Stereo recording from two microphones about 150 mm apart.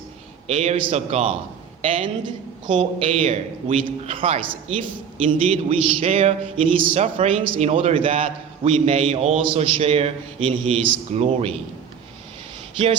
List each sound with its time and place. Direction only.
0.4 s a man's voice: 45° right (ahead or behind)
3.1 s a man's voice: 45° right (ahead or behind)
12.7 s speech: 35° right (ahead or behind)